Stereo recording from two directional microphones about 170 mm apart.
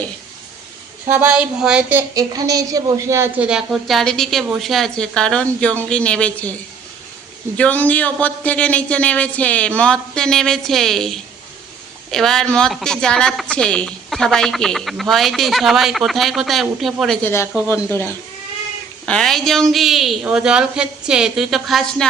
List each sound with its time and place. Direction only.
1.1 s a woman's voice: 10° right (ahead or behind)
17.2 s a woman's voice: 15° left (ahead or behind)